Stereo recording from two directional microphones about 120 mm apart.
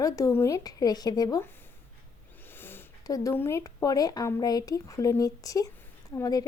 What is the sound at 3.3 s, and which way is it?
A woman's voice, 20° left (ahead or behind).